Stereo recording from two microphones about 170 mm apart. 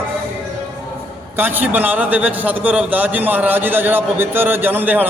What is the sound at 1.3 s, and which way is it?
A man's voice, 10° right (ahead or behind).